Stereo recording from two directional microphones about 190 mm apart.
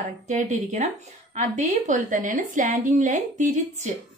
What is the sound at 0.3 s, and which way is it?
A woman's voice, 35° right (ahead or behind).